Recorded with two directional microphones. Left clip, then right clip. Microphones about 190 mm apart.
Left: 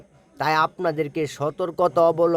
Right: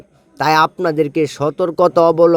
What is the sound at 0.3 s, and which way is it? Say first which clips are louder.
Speech: right 8 dB; 25° right (ahead or behind).